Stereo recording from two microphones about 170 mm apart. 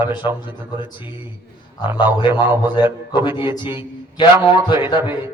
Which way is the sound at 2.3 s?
15° right (ahead or behind).